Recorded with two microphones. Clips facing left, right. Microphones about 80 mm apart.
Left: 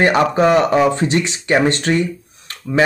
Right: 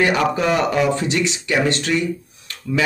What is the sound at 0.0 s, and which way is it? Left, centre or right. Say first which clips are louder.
Speech: left 4 dB; left.